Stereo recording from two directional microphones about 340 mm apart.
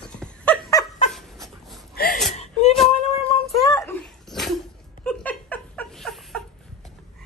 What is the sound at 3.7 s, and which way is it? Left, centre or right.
Dog, centre.